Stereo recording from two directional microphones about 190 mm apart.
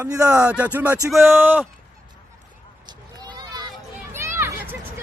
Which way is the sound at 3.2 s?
20° right (ahead or behind).